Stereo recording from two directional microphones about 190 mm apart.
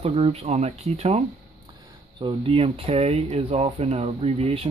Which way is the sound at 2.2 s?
30° right (ahead or behind).